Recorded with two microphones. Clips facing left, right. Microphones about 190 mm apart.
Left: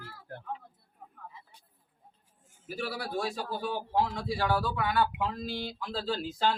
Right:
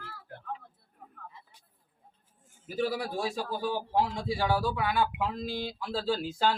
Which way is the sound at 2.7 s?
20° right (ahead or behind).